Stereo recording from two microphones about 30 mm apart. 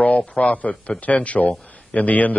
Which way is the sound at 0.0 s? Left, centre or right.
Left.